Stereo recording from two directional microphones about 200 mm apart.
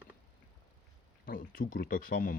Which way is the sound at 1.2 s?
45° left (ahead or behind).